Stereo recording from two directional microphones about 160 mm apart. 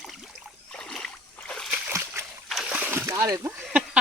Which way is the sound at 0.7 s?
5° left (ahead or behind).